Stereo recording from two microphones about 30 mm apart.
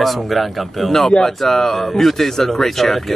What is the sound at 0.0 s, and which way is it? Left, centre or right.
Speech, centre.